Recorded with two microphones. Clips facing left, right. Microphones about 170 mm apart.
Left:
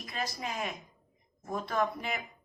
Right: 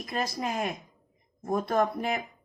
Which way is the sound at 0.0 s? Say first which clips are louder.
Right 6 dB; 45° right (ahead or behind).